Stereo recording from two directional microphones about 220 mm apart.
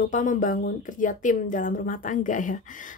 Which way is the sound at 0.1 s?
35° left (ahead or behind).